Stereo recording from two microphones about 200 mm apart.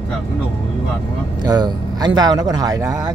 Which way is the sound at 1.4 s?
20° right (ahead or behind).